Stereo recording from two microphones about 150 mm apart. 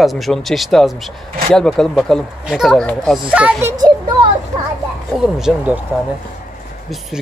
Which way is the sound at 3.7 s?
25° right (ahead or behind).